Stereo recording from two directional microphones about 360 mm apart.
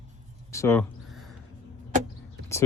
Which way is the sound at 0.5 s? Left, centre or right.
Centre.